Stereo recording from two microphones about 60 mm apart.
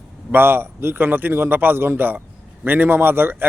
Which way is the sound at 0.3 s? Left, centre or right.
Right.